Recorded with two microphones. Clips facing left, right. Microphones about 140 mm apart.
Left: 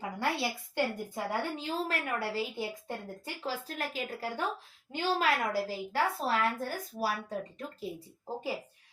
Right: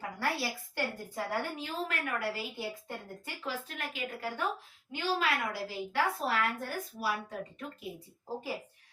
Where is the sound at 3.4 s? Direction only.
35° left (ahead or behind).